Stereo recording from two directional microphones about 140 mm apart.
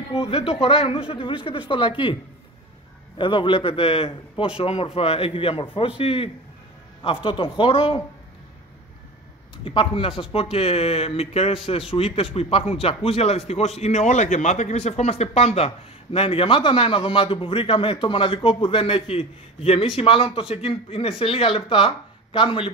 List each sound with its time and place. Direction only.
0.1 s a man's voice: 45° left (ahead or behind)
3.2 s a man's voice: 35° left (ahead or behind)
9.7 s a man's voice: 40° left (ahead or behind)